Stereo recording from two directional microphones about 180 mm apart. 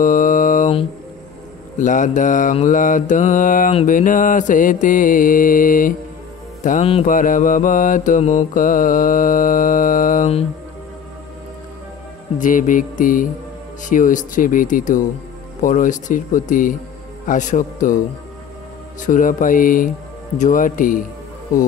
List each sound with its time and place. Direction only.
0.0 s mantra: 50° left (ahead or behind)
1.8 s mantra: 45° left (ahead or behind)
6.8 s mantra: 35° left (ahead or behind)
7.1 s mantra: 50° left (ahead or behind)
12.4 s mantra: 45° left (ahead or behind)